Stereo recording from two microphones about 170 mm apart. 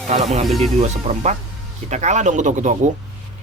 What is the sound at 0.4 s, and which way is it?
Speech, centre (ahead or behind).